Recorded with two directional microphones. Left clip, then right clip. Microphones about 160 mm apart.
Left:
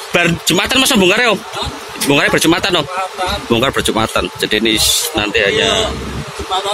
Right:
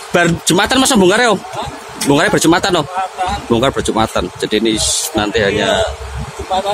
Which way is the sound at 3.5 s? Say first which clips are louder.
Left 1 dB; 15° right (ahead or behind).